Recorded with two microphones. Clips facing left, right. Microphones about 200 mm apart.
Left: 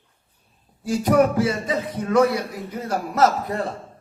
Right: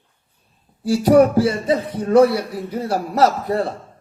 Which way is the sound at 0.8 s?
35° right (ahead or behind).